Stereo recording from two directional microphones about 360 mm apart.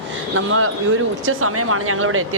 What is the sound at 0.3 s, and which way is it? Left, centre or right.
Speech, right.